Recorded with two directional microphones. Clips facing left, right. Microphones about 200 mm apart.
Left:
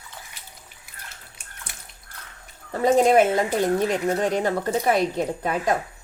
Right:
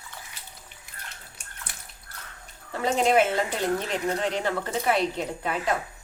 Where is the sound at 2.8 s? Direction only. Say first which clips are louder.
Left 5 dB; 40° left (ahead or behind).